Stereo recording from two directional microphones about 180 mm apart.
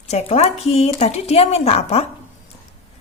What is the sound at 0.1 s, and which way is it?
A woman's voice, 35° left (ahead or behind).